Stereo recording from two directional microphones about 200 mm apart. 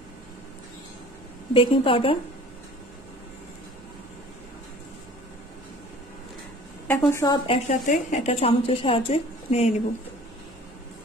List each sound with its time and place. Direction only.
1.5 s a woman's voice: 25° left (ahead or behind)
6.9 s a woman's voice: 15° left (ahead or behind)
7.4 s a woman's voice: 35° left (ahead or behind)